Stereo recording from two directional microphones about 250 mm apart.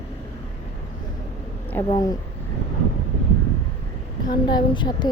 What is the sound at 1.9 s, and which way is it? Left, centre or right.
Speech, centre.